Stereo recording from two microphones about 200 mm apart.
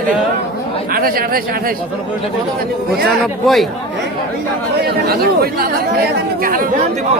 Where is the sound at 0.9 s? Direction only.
45° right (ahead or behind).